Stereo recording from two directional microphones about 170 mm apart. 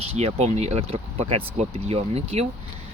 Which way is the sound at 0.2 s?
40° right (ahead or behind).